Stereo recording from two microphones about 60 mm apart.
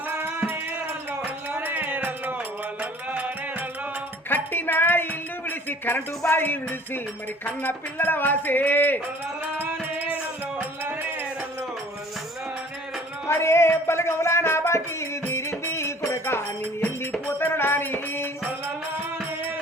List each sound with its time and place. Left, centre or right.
0.1 s music: right
1.2 s a sound: right
3.1 s music: right
4.3 s a sound: left
7.4 s speech: left
9.6 s music: right
13.2 s music: left
16.8 s music: left